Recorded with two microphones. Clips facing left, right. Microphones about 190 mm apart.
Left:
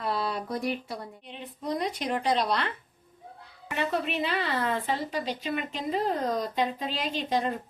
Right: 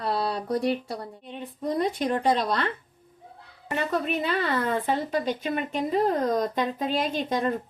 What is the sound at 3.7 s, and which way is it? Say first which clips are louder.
A woman's voice: right 2 dB; 45° right (ahead or behind).